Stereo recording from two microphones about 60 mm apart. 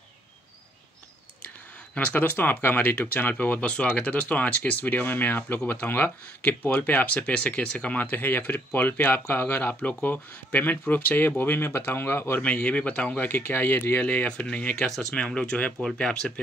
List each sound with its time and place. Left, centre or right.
2.1 s speech: left
7.3 s speech: centre; by 12.4 s left
12.4 s speech: left
14.0 s speech: left; by 16.3 s centre